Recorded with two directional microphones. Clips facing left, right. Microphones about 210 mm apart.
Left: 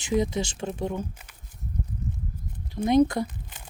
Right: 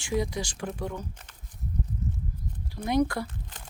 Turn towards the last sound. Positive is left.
turn(degrees=20)  # may be behind; listen again after turning